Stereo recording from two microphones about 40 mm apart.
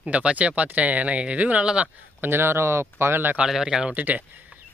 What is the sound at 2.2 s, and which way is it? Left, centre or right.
Speech, right.